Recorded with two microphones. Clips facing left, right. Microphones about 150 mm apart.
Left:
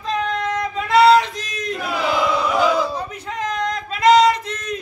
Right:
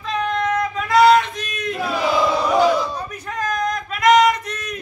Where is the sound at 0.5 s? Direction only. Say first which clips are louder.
Right 1 dB; 30° left (ahead or behind).